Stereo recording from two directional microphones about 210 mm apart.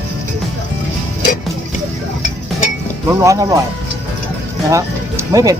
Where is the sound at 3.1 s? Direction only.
15° right (ahead or behind).